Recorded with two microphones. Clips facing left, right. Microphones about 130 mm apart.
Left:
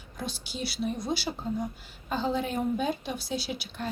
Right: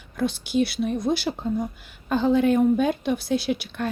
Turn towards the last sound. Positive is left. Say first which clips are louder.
# right 8 dB
turn(degrees=-60)  # may be behind; listen again after turning